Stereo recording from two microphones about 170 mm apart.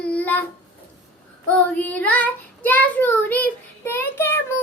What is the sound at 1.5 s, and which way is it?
Child singing, 10° left (ahead or behind).